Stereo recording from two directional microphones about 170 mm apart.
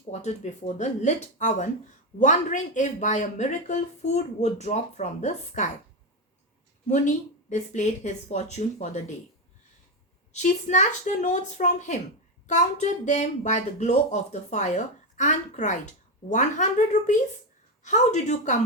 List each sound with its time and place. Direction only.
0.1 s speech: 45° left (ahead or behind)
6.8 s a woman's voice: 45° left (ahead or behind)
10.3 s speech: 45° left (ahead or behind)